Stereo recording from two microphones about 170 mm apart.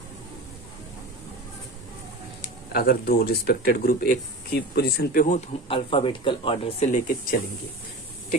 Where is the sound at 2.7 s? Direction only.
65° left (ahead or behind); by 7.0 s 35° left (ahead or behind).